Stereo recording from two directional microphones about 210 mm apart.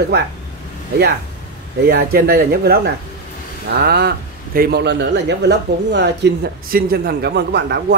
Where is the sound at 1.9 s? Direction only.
45° right (ahead or behind).